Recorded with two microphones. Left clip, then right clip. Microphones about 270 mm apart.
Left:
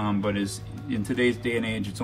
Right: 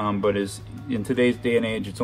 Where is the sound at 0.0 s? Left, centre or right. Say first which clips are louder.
Right 5 dB; right.